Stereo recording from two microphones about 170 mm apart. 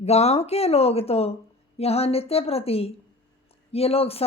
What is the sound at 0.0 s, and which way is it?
Speech, 40° left (ahead or behind).